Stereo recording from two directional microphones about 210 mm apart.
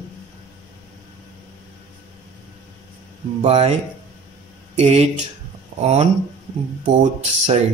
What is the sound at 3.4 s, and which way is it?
Speech, 30° right (ahead or behind).